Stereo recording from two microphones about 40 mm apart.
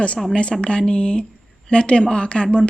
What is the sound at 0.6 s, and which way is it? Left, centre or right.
Speech, left.